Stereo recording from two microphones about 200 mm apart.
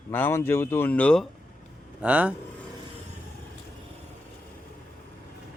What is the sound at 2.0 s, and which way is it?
Speech, 5° right (ahead or behind).